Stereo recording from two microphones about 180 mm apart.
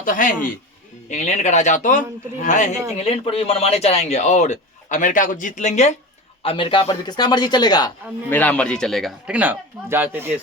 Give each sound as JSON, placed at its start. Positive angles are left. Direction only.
{"t": 0.0, "sound": "a man's voice", "side_deg": 45}
{"t": 6.4, "sound": "speech", "side_deg": 30}
{"t": 8.3, "sound": "speech", "side_deg": 10}